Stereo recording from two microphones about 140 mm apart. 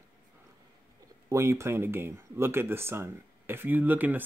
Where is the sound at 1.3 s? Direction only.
20° right (ahead or behind).